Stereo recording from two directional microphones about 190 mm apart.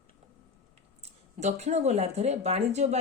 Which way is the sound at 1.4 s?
35° right (ahead or behind).